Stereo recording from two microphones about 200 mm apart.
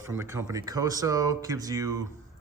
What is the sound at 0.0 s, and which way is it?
Speech, 15° right (ahead or behind).